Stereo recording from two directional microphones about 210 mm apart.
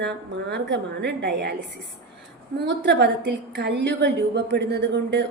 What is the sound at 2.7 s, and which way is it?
A woman's voice, 55° right (ahead or behind).